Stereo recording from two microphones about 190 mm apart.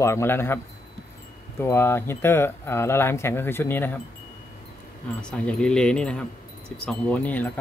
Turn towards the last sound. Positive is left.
turn(degrees=10)  # may be behind; listen again after turning